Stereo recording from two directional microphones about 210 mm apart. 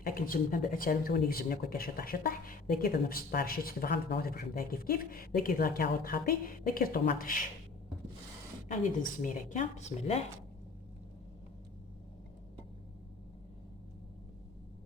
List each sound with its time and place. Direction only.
0.0 s speech: 40° left (ahead or behind)
8.6 s a woman's voice: 35° left (ahead or behind)